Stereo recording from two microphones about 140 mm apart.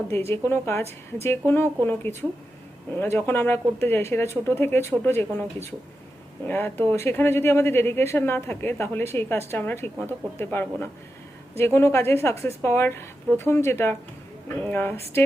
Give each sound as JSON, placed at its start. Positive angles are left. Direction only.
{"t": 0.3, "sound": "speech", "side_deg": 15}